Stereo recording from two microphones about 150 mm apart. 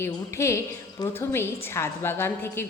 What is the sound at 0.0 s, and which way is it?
A woman's voice, 20° left (ahead or behind).